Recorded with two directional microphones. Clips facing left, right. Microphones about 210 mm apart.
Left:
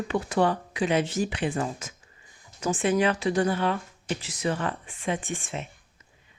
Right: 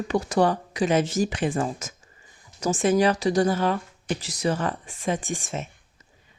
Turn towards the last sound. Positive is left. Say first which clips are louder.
# right 3 dB
turn(degrees=-40)  # may be behind; listen again after turning